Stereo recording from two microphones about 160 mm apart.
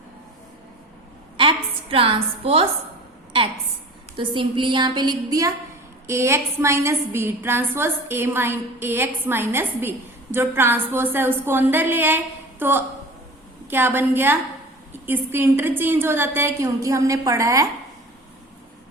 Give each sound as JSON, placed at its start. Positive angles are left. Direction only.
{"t": 1.4, "sound": "a woman's voice", "side_deg": -35}
{"t": 4.2, "sound": "a woman's voice", "side_deg": -30}